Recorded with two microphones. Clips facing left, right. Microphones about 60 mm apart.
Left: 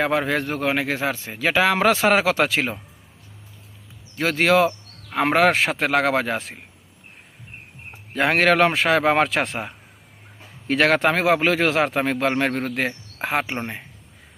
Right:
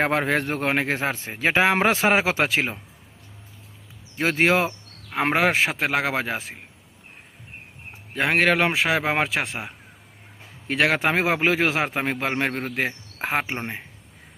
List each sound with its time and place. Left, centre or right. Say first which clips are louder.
0.0 s a man's voice: left 1 dB; right; by 2.7 s centre
4.2 s a man's voice: left 2 dB; right
5.3 s a man's voice: left 3 dB; centre
8.1 s speech: left 2 dB; centre
11.1 s a man's voice: left 2 dB; centre
13.2 s a man's voice: left 2 dB; right